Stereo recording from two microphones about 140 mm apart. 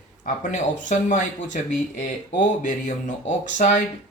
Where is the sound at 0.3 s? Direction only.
65° left (ahead or behind).